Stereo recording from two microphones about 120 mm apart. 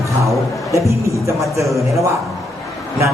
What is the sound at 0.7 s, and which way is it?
Speech, 25° right (ahead or behind).